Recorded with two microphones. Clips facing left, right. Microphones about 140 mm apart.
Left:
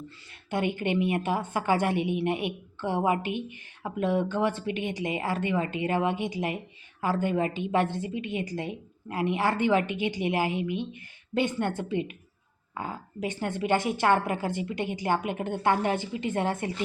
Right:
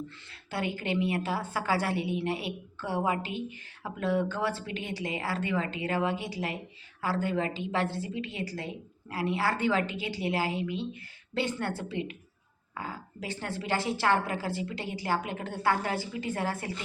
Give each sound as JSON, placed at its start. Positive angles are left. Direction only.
{"t": 0.5, "sound": "a woman's voice", "side_deg": 20}